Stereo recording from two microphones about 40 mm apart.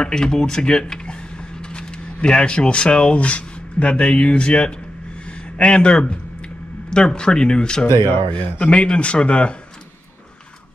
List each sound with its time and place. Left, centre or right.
0.0 s speech: centre